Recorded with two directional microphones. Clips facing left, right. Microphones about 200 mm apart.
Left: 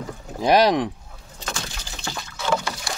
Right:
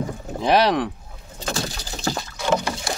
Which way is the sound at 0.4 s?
10° left (ahead or behind).